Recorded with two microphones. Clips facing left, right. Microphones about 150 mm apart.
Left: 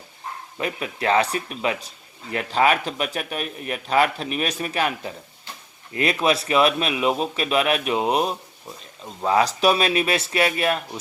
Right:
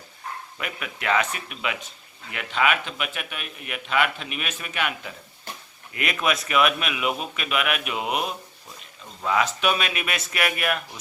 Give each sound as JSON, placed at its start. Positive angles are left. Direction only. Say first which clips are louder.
{"t": 0.6, "sound": "speech", "louder": "left 7 dB", "side_deg": 30}